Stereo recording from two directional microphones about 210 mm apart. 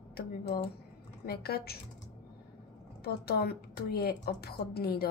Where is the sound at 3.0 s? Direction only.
50° left (ahead or behind).